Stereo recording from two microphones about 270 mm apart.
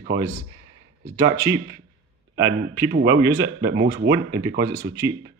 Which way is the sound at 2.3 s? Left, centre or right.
Centre.